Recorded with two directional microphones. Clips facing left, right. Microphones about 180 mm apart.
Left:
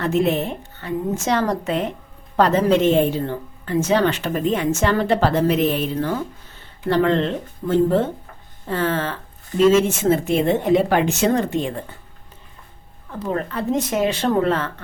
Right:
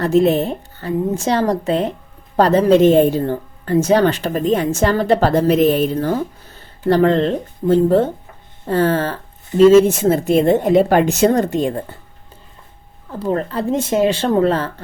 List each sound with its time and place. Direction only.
0.0 s a woman's voice: 35° right (ahead or behind)
13.1 s a woman's voice: 35° right (ahead or behind)